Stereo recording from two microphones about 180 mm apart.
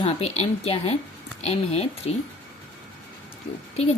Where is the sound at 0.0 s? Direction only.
35° left (ahead or behind).